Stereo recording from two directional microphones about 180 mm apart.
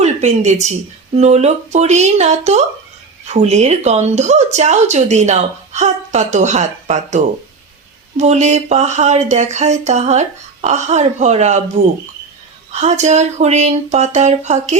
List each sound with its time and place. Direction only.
0.0 s speech: 40° right (ahead or behind)